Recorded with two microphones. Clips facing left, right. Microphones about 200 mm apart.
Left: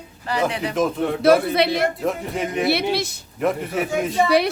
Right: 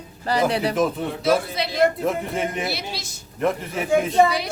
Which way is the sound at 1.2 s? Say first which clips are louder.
Left 6 dB; 60° left (ahead or behind).